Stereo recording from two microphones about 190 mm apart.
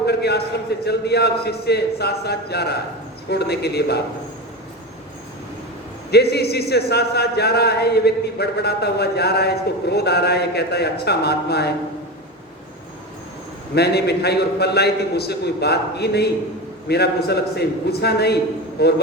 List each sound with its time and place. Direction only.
0.0 s a sound: 60° left (ahead or behind)
0.9 s a man's voice: 60° left (ahead or behind)
6.1 s a man's voice: 60° left (ahead or behind)
13.7 s a man's voice: 60° left (ahead or behind)